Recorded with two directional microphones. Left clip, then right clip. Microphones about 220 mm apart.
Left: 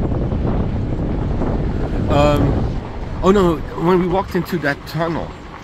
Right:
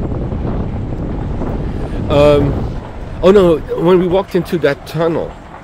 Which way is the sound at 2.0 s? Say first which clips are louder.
Right 6 dB; 45° right (ahead or behind).